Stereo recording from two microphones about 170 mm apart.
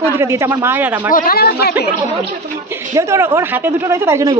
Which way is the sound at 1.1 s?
55° left (ahead or behind).